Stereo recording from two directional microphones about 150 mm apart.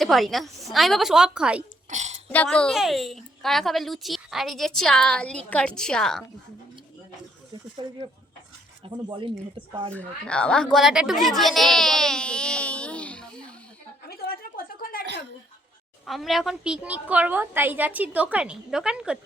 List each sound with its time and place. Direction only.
0.0 s a woman's voice: centre (ahead or behind)
1.9 s burping: 50° right (ahead or behind)
2.3 s a woman's voice: 10° left (ahead or behind)
8.8 s speech: 35° right (ahead or behind)
9.9 s a woman's voice: 10° left (ahead or behind)
14.1 s a sound: 90° left
16.0 s a woman's voice: centre (ahead or behind)